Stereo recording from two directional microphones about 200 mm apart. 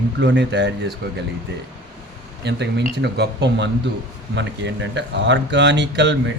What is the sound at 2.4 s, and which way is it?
Speech, 60° right (ahead or behind).